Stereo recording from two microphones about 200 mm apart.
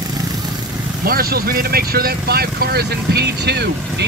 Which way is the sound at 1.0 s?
50° right (ahead or behind).